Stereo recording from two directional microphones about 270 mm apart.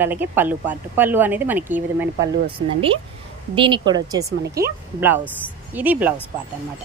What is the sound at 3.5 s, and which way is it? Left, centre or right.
Speech, centre.